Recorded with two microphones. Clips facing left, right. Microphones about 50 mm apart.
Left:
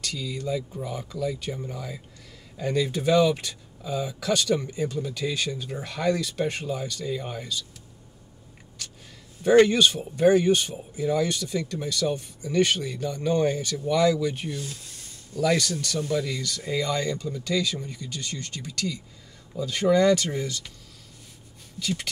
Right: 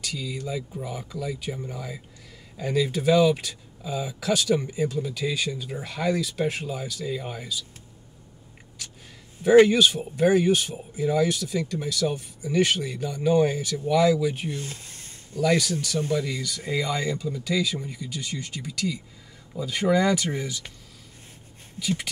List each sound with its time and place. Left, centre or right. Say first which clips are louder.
0.0 s speech: left 1 dB; centre
9.4 s speech: right 2 dB; centre
14.5 s speech: right 1 dB; right
15.4 s speech: right 1 dB; centre
21.7 s speech: right 2 dB; centre